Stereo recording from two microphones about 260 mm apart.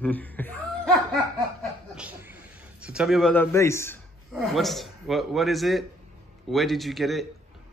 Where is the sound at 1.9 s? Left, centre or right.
Centre.